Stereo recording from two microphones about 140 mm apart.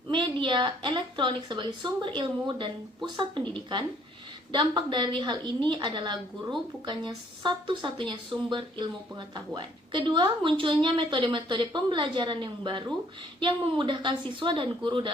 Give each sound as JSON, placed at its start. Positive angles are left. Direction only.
{"t": 0.1, "sound": "a woman's voice", "side_deg": -35}